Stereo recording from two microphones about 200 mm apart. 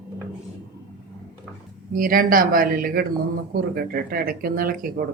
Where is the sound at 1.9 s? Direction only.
45° right (ahead or behind).